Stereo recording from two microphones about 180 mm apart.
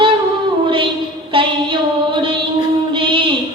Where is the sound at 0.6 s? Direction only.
30° right (ahead or behind).